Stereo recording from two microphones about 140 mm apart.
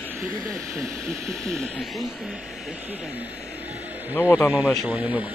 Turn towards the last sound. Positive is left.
turn(degrees=-10)  # may be behind; listen again after turning